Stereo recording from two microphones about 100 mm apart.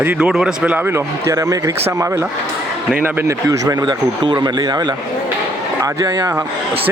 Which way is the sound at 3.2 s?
35° right (ahead or behind).